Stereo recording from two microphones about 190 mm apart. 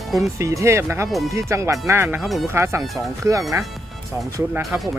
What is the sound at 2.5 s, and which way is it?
Speech, 15° right (ahead or behind).